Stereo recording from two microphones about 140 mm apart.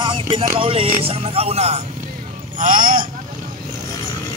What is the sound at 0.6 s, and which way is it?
Speech, 40° right (ahead or behind).